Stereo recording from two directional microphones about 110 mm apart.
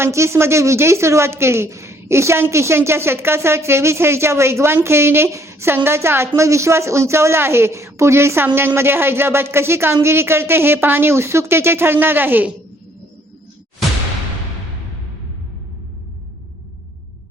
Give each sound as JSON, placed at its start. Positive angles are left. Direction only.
{"t": 0.0, "sound": "speech", "side_deg": -25}